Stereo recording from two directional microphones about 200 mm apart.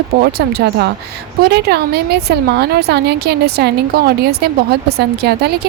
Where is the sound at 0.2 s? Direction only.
50° right (ahead or behind).